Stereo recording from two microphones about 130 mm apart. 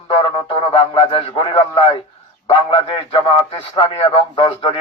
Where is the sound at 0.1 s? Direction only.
40° left (ahead or behind).